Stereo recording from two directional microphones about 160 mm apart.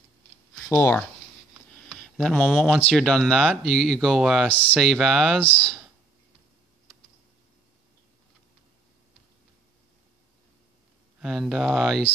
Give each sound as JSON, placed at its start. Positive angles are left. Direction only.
{"t": 0.7, "sound": "speech", "side_deg": 15}
{"t": 1.9, "sound": "speech", "side_deg": 5}
{"t": 11.1, "sound": "speech", "side_deg": -5}